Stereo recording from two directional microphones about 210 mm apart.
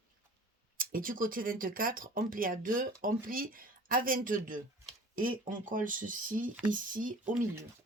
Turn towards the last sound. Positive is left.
turn(degrees=-40)  # may be behind; listen again after turning